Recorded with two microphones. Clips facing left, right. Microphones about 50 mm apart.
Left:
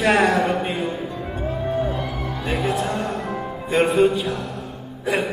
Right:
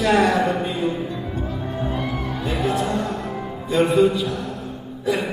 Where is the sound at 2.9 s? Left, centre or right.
Left.